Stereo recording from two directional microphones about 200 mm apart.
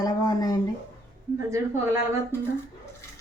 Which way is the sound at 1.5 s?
15° right (ahead or behind).